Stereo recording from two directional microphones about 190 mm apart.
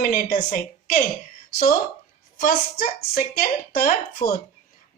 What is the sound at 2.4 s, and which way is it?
A woman's voice, 50° left (ahead or behind).